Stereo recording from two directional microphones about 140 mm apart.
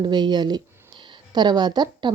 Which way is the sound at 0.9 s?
30° right (ahead or behind).